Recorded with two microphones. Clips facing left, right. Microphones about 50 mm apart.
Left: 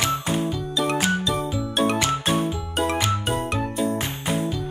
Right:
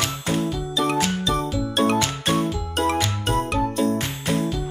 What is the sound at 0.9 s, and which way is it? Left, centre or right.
Music, centre.